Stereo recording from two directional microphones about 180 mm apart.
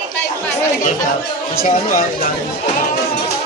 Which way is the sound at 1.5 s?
45° left (ahead or behind).